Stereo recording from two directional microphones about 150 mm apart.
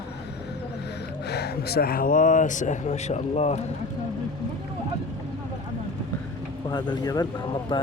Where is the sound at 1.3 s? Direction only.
90° left; by 3.6 s 45° left (ahead or behind).